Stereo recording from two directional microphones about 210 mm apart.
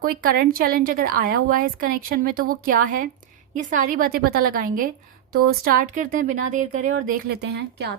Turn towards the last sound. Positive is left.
turn(degrees=-55)  # may be behind; listen again after turning